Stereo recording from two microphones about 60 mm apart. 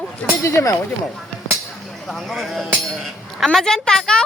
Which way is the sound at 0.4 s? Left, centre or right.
Left.